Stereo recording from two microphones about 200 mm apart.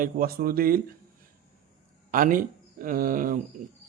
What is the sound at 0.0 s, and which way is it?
Speech, 45° right (ahead or behind).